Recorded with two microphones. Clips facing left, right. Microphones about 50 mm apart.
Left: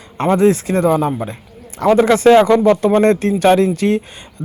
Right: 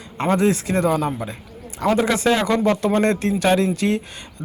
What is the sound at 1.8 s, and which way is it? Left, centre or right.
Speech, left.